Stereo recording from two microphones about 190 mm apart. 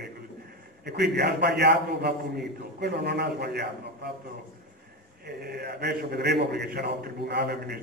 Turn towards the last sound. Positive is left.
turn(degrees=-60)  # may be behind; listen again after turning